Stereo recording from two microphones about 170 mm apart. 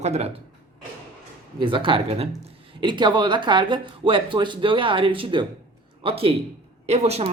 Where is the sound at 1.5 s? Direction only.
30° right (ahead or behind).